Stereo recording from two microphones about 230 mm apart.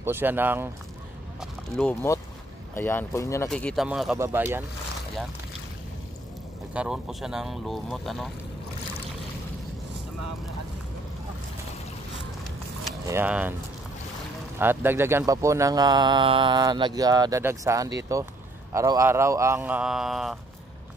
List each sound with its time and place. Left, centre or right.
0.0 s speech: centre
1.4 s speech: centre
6.7 s speech: centre
13.1 s speech: centre
14.6 s speech: centre